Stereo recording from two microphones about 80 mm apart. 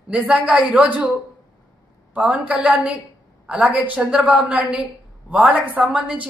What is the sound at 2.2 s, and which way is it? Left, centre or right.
A man's voice, centre.